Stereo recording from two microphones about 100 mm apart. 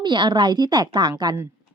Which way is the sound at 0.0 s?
50° right (ahead or behind).